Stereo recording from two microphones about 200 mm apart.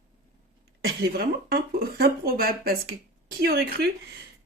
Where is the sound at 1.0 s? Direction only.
50° right (ahead or behind).